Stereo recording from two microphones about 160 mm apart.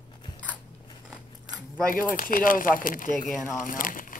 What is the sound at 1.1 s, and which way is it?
Scissors, 5° right (ahead or behind).